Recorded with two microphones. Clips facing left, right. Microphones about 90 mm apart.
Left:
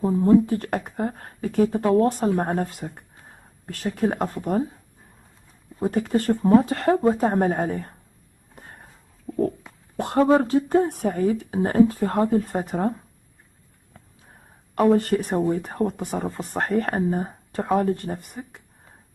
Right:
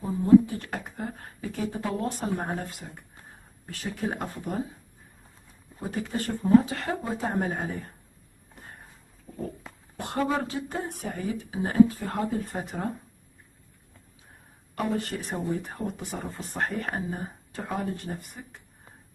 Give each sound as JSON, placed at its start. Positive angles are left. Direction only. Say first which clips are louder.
{"t": 0.2, "sound": "speech", "louder": "right 1 dB", "side_deg": 55}
{"t": 5.8, "sound": "speech", "louder": "left 9 dB", "side_deg": 50}
{"t": 8.5, "sound": "a sound", "louder": "left 2 dB", "side_deg": 45}
{"t": 9.3, "sound": "a sound", "louder": "left 14 dB", "side_deg": 90}
{"t": 9.9, "sound": "speech", "louder": "left 9 dB", "side_deg": 45}
{"t": 14.8, "sound": "speech", "louder": "left 11 dB", "side_deg": 45}